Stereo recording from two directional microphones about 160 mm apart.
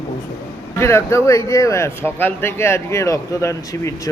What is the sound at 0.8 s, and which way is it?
Speech, 15° left (ahead or behind).